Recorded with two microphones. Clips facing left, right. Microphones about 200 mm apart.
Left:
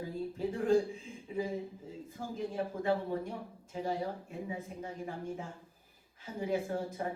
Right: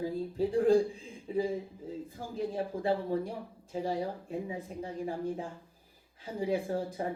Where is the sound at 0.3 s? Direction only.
35° right (ahead or behind).